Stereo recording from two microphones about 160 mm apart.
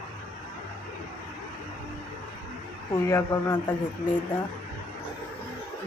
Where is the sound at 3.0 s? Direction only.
20° left (ahead or behind).